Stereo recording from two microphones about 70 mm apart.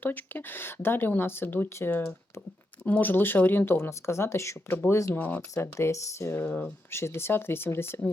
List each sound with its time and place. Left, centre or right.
0.0 s speech: left
5.1 s speech: left
5.7 s speech: left
6.3 s speech: left
6.9 s speech: left